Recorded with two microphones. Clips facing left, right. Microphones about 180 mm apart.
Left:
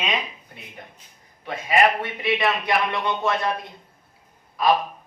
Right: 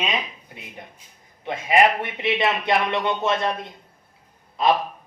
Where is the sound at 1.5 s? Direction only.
20° right (ahead or behind).